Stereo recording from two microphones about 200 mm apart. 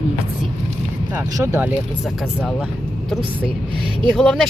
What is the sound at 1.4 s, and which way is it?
Speech, 10° right (ahead or behind).